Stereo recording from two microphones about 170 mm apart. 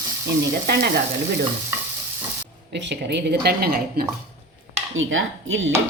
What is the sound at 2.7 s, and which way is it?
Speech, 90° right.